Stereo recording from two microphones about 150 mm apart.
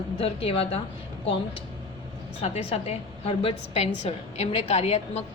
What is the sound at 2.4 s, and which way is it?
A woman's voice, 45° left (ahead or behind).